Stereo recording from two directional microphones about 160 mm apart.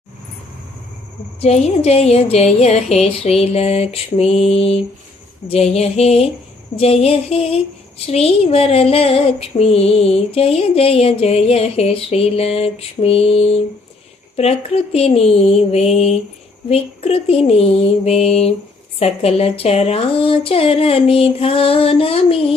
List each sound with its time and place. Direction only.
1.4 s speech: 40° left (ahead or behind)